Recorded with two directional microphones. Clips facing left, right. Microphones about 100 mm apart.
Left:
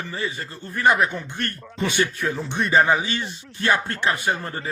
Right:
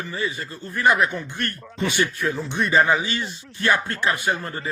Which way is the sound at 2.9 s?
30° left (ahead or behind).